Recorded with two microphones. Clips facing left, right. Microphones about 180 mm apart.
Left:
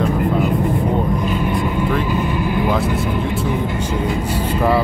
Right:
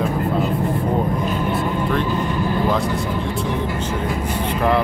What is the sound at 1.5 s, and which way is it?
Vehicle, 5° left (ahead or behind).